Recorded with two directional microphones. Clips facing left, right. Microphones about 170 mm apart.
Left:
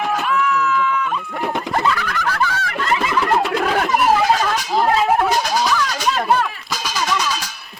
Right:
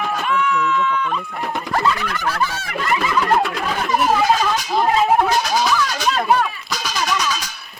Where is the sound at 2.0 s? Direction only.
25° right (ahead or behind).